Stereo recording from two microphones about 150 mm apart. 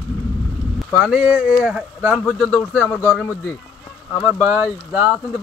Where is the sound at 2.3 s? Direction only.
5° left (ahead or behind).